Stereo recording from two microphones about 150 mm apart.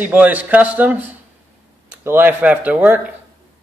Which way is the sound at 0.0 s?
10° right (ahead or behind).